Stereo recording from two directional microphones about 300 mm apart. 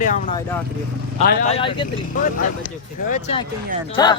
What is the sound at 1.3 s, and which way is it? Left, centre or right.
Speech, left.